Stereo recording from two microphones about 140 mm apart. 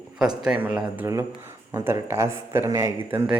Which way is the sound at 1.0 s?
20° right (ahead or behind).